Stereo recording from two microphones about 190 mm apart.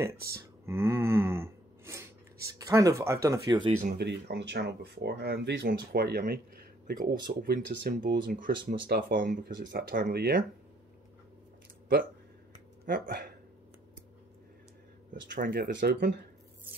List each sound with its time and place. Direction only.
0.7 s gasp: 15° right (ahead or behind)
2.4 s speech: 15° right (ahead or behind)
3.8 s speech: 60° right (ahead or behind)
8.0 s speech: 50° right (ahead or behind)
12.8 s speech: 55° right (ahead or behind)
15.3 s speech: 50° right (ahead or behind)
15.7 s speech: 65° right (ahead or behind)